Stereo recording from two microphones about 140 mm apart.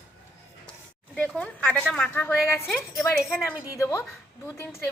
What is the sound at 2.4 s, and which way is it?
Speech, centre (ahead or behind).